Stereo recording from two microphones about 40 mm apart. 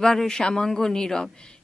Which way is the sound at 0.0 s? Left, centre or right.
Centre.